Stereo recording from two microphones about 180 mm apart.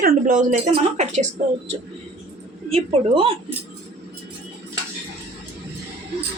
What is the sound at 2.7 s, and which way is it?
Speech, 30° right (ahead or behind).